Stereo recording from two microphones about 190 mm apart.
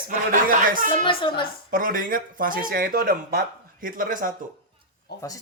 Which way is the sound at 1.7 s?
45° right (ahead or behind).